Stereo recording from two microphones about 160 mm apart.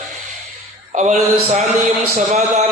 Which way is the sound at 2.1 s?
45° right (ahead or behind).